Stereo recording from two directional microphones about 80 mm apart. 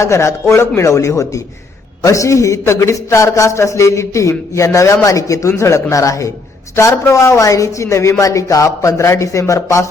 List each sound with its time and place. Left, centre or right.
0.0 s a man's voice: left